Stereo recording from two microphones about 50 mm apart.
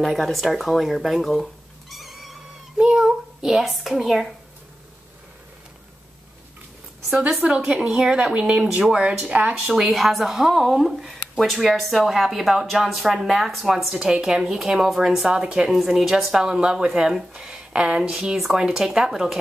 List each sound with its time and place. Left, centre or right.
0.0 s speech: centre
2.8 s a child's voice: centre
7.1 s a woman's voice: centre
8.6 s speech: centre
8.9 s speech: centre
9.6 s speech: centre
15.7 s speech: centre